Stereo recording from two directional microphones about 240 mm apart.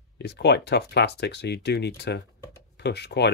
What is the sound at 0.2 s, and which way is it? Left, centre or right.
Speech, left.